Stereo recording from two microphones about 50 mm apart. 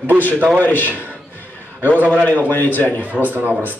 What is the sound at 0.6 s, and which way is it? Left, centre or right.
Speech, left.